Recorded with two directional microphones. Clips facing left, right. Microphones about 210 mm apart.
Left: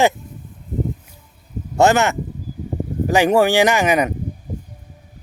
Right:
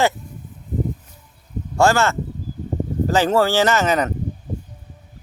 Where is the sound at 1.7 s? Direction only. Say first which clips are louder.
Left 2 dB; 20° left (ahead or behind).